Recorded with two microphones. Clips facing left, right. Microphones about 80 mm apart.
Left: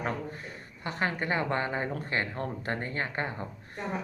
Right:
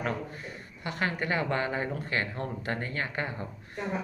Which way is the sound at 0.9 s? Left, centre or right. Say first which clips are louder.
Even; left.